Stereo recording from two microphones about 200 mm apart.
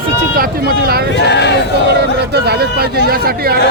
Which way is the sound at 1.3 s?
60° left (ahead or behind).